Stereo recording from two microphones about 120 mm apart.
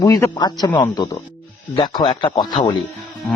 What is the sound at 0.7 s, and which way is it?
A man's voice, 35° left (ahead or behind).